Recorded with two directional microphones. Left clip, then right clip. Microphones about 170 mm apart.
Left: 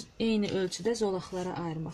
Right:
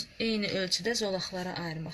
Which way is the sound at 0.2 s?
30° left (ahead or behind).